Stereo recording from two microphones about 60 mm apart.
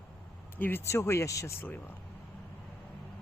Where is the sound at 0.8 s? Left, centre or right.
Left.